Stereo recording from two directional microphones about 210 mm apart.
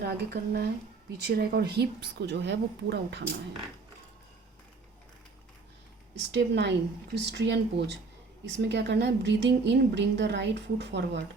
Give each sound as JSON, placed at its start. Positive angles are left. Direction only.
{"t": 0.0, "sound": "a woman's voice", "side_deg": -50}
{"t": 6.1, "sound": "a woman's voice", "side_deg": -55}